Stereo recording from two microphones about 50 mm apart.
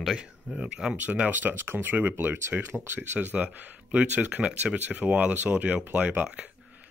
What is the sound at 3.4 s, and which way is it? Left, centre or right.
Speech, right.